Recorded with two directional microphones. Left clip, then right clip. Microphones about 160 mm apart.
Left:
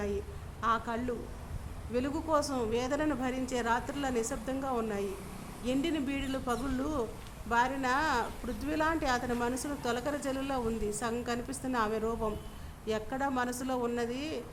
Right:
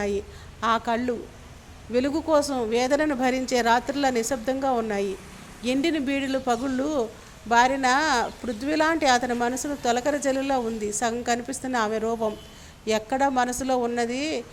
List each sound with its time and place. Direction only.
0.6 s a woman's voice: 30° right (ahead or behind)